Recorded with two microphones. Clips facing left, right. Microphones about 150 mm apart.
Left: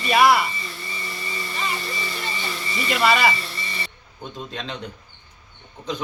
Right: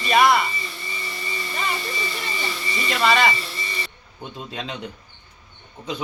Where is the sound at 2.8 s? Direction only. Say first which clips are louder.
Even; 5° left (ahead or behind).